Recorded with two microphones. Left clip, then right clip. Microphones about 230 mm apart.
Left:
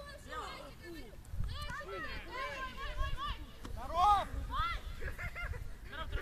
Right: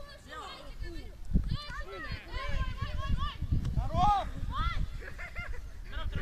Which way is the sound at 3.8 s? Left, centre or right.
Left.